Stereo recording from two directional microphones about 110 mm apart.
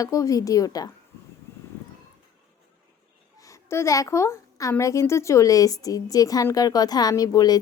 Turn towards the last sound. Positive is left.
turn(degrees=35)  # may be behind; listen again after turning